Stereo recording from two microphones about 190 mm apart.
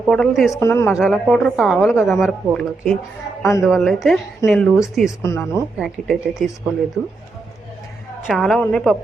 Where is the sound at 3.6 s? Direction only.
Centre (ahead or behind).